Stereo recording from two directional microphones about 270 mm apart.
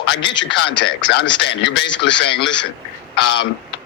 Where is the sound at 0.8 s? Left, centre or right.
Left.